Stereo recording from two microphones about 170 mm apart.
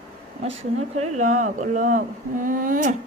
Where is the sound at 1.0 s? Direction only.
45° right (ahead or behind).